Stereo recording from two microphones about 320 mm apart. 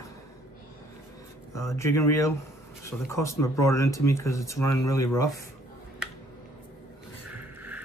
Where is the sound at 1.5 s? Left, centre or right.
Centre.